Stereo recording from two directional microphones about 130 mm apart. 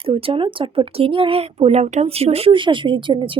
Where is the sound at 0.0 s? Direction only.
45° right (ahead or behind).